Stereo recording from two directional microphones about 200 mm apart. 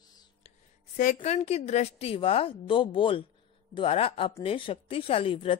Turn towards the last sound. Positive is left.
turn(degrees=25)  # may be behind; listen again after turning